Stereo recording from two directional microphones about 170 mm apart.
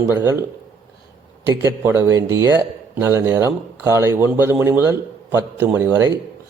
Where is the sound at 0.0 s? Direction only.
15° right (ahead or behind).